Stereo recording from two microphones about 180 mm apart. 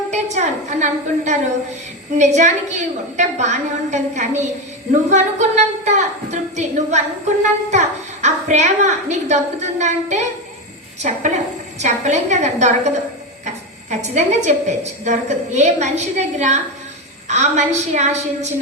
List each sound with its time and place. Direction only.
0.1 s a child's voice: 40° right (ahead or behind)
14.0 s a child's voice: 40° right (ahead or behind)